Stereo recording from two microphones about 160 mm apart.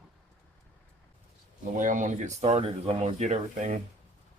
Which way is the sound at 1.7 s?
55° right (ahead or behind).